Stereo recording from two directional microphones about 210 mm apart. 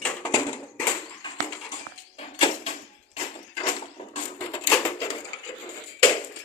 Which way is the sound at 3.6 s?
30° left (ahead or behind).